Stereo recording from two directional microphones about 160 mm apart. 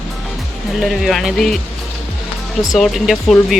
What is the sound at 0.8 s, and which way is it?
Speech, centre (ahead or behind).